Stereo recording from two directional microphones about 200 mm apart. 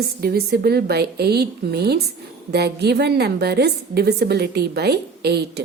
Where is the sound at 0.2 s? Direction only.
50° right (ahead or behind).